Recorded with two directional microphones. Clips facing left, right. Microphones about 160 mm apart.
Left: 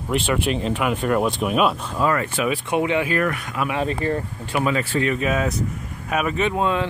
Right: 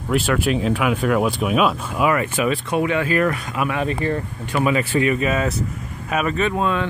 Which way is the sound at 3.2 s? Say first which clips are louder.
Right 3 dB; 30° right (ahead or behind).